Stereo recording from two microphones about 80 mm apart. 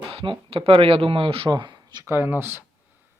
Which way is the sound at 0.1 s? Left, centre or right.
Right.